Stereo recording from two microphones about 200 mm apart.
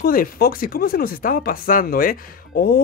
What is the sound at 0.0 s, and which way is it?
Speech, 45° left (ahead or behind).